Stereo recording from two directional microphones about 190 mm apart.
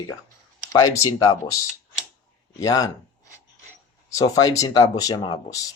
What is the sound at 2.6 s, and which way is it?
Speech, 20° left (ahead or behind).